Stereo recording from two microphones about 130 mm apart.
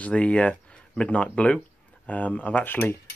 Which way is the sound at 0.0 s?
10° left (ahead or behind).